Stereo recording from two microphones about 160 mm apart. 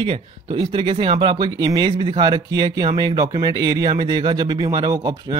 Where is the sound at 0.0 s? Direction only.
35° right (ahead or behind).